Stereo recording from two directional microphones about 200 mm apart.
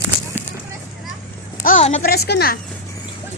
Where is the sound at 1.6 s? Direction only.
35° left (ahead or behind).